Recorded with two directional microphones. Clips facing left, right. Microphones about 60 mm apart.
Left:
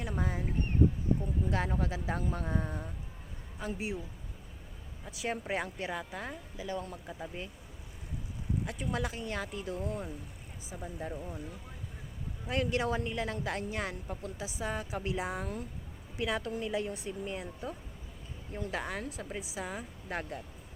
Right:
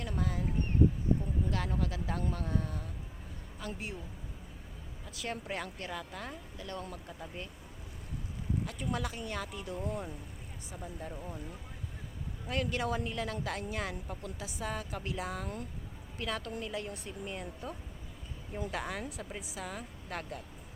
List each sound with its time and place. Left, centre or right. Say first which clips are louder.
0.0 s a sound: left 1 dB; centre
1.5 s a woman's voice: left 5 dB; centre
5.0 s a woman's voice: left 3 dB; centre
8.6 s speech: left 3 dB; centre
12.5 s a woman's voice: left 2 dB; centre